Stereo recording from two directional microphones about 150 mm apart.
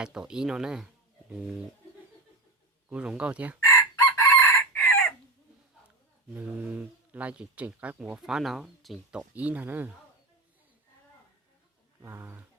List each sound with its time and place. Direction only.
0.0 s speech: 5° right (ahead or behind)
2.9 s speech: 5° right (ahead or behind)
3.7 s chicken: 20° left (ahead or behind)
6.3 s speech: 10° right (ahead or behind)
12.0 s speech: 15° right (ahead or behind)